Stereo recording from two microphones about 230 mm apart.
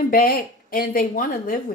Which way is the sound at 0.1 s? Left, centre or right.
Left.